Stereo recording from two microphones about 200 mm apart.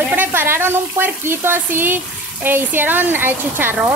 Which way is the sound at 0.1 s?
10° right (ahead or behind).